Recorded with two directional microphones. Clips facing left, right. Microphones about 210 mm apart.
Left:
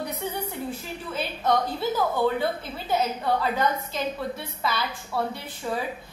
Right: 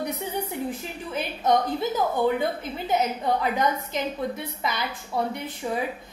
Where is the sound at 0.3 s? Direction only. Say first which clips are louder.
Right 2 dB; 15° right (ahead or behind).